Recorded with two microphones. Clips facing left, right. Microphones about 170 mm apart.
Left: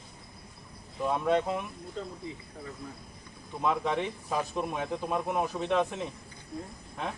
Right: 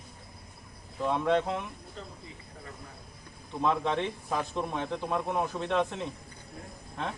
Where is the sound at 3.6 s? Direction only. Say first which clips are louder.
Right 1 dB; 10° left (ahead or behind).